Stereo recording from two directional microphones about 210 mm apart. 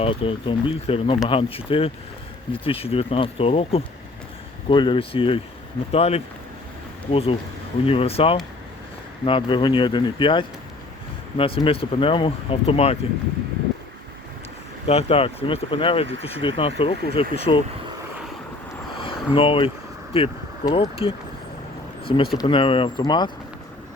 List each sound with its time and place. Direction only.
0.0 s speech: 25° left (ahead or behind)
14.8 s speech: 30° left (ahead or behind)
18.9 s vehicle: 25° left (ahead or behind)
20.1 s speech: 25° left (ahead or behind)